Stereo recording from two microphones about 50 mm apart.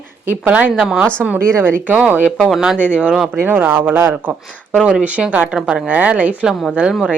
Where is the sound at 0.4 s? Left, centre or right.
Right.